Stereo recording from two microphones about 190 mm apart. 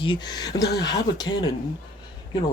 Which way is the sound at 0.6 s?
60° left (ahead or behind).